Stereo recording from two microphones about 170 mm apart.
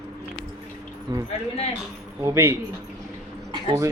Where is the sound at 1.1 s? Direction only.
25° right (ahead or behind).